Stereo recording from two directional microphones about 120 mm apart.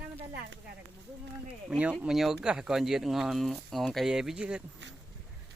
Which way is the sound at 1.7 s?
10° right (ahead or behind).